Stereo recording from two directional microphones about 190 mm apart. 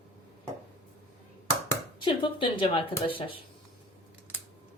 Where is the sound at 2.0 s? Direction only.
25° left (ahead or behind).